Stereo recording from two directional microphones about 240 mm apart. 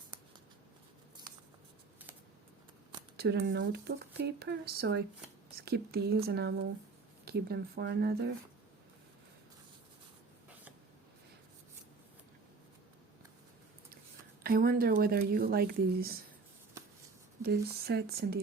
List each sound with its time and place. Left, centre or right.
3.2 s speech: right
14.4 s speech: right
17.4 s speech: right